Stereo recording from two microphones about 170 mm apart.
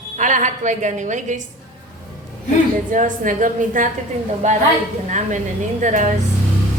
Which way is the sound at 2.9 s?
50° right (ahead or behind).